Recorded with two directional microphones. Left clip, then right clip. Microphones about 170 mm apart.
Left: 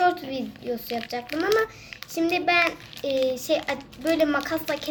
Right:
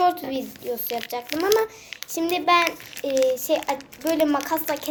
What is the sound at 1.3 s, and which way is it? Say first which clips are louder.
Speech: right 2 dB; 25° right (ahead or behind).